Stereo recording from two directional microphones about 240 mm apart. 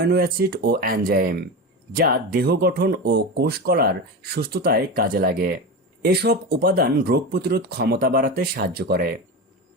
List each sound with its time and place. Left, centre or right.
0.0 s speech: right